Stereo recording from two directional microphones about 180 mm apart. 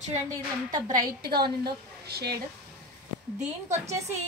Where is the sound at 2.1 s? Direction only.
60° right (ahead or behind).